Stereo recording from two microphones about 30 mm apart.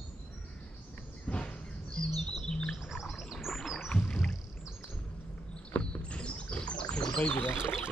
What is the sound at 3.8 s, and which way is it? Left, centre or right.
Rowboat, left.